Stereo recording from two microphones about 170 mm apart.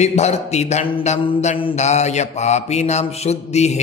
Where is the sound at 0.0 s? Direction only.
40° left (ahead or behind).